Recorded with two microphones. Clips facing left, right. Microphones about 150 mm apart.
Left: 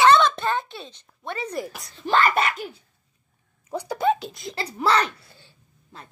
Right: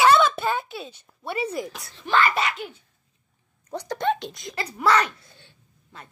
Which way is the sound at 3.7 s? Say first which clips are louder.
Left 2 dB; 10° left (ahead or behind).